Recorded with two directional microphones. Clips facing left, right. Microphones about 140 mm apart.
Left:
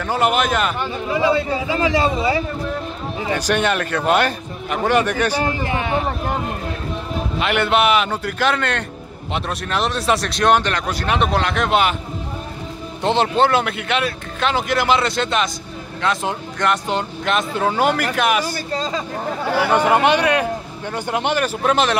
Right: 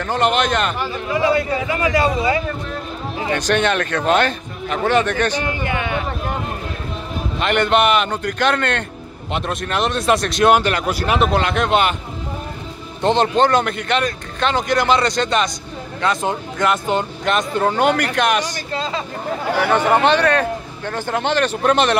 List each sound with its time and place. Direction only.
0.0 s a man's voice: 5° left (ahead or behind)
1.1 s a man's voice: 25° left (ahead or behind)
3.3 s speech: 10° left (ahead or behind)
5.4 s speech: 35° left (ahead or behind)
7.3 s a man's voice: 5° left (ahead or behind)
13.0 s a man's voice: 5° left (ahead or behind)
18.7 s speech: 40° left (ahead or behind)
19.7 s speech: 10° left (ahead or behind)